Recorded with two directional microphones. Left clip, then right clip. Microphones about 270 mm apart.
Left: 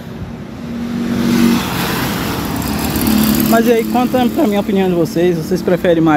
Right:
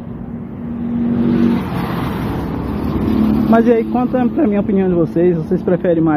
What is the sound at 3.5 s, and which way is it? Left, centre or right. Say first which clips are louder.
Speech: left 1 dB; centre.